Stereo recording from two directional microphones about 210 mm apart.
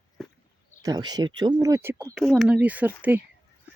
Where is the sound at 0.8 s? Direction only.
20° right (ahead or behind).